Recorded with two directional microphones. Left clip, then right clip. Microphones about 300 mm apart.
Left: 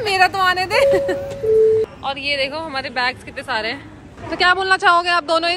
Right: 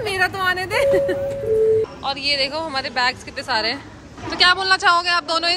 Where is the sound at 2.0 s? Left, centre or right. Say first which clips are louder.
Even; centre.